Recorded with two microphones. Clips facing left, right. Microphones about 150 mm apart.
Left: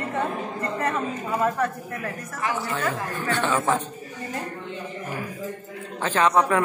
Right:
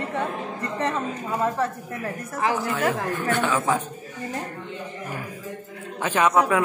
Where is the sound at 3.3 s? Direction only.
5° right (ahead or behind).